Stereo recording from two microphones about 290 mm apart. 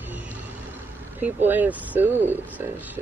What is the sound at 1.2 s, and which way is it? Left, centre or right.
Speech, centre.